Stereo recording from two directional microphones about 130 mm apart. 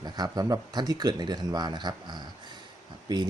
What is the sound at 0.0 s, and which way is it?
Speech, 30° right (ahead or behind).